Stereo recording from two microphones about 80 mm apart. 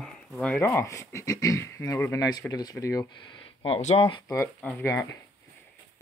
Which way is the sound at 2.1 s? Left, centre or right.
Left.